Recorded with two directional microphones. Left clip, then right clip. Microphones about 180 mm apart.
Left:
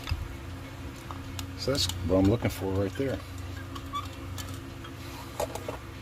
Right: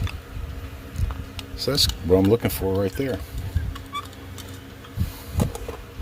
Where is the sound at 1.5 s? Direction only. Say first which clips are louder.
Right 7 dB; 40° right (ahead or behind).